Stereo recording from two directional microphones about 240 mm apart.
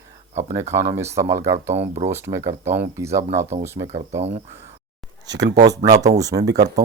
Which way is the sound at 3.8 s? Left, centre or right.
Right.